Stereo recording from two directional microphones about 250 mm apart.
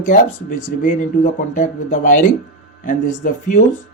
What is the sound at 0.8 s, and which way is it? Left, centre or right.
Speech, left.